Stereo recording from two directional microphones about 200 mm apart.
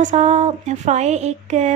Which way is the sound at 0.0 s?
35° right (ahead or behind).